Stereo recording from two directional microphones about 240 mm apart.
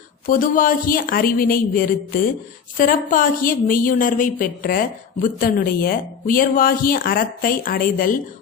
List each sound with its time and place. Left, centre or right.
0.3 s a woman's voice: left